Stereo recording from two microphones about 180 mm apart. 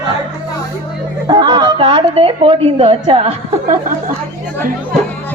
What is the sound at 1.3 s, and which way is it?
A woman's voice, 25° right (ahead or behind).